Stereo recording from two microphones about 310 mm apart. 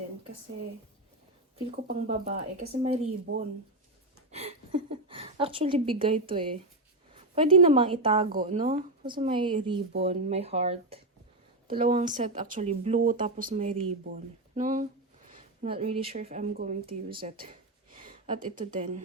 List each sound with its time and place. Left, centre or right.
1.9 s a woman's voice: right